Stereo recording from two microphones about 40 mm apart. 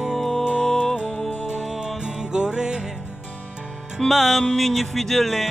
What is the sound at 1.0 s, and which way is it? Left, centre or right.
Music, centre.